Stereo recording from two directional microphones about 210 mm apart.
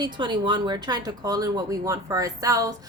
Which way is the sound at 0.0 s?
20° right (ahead or behind).